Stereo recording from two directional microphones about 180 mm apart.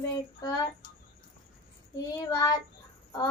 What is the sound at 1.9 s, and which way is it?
Child singing, 20° left (ahead or behind).